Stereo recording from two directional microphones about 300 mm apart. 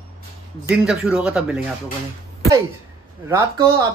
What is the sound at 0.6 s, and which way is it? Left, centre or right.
A man's voice, centre.